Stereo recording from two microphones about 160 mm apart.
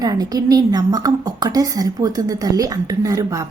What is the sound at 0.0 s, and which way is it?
A woman's voice, 25° right (ahead or behind).